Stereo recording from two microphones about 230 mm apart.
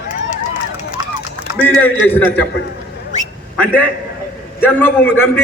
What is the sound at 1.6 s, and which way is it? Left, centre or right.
Speech, centre.